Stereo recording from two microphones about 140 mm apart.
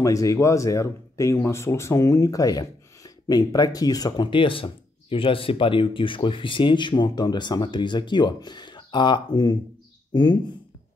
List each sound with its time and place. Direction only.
0.0 s speech: 25° left (ahead or behind)